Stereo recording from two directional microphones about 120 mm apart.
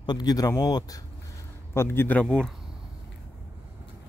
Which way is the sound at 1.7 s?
20° left (ahead or behind).